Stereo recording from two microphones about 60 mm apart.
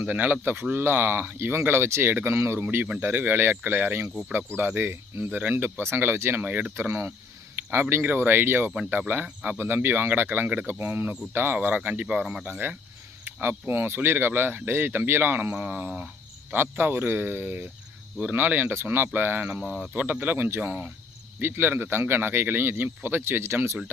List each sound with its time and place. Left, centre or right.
0.0 s speech: right
3.0 s speech: right
6.4 s speech: right
6.7 s speech: right
9.2 s speech: right
9.6 s speech: right
12.2 s speech: centre
12.5 s speech: right
16.6 s speech: right
21.4 s speech: right